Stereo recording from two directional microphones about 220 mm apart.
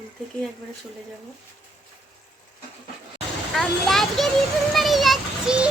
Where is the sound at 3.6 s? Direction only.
Centre (ahead or behind).